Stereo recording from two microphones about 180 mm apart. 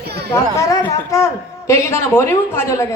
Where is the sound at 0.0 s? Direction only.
65° right (ahead or behind).